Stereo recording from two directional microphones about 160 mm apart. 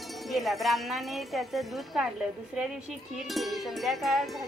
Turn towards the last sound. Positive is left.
turn(degrees=0)  # may be behind; listen again after turning